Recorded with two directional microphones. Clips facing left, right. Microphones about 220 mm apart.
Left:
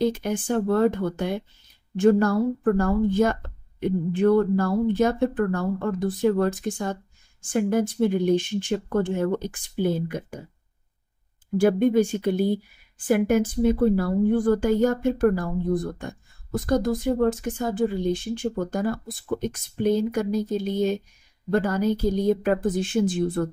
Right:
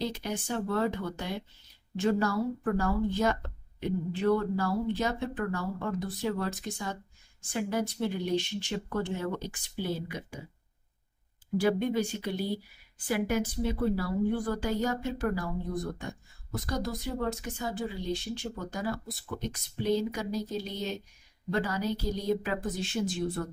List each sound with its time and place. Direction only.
0.0 s speech: 50° left (ahead or behind)
11.5 s speech: 50° left (ahead or behind)